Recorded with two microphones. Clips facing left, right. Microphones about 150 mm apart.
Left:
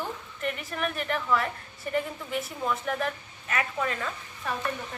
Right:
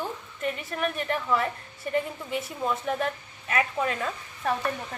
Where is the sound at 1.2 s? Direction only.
25° right (ahead or behind).